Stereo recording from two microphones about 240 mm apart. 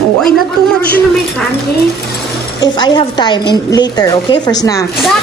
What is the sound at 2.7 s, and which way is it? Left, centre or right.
A woman's voice, centre.